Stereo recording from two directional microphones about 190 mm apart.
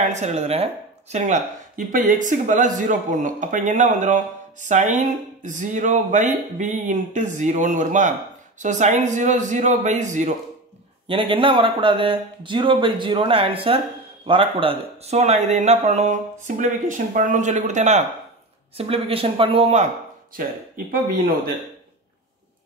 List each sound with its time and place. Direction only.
0.0 s a man's voice: 35° right (ahead or behind)
11.1 s a man's voice: 30° right (ahead or behind)
20.3 s speech: 50° right (ahead or behind)